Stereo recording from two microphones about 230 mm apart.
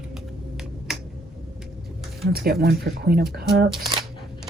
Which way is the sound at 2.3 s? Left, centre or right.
Right.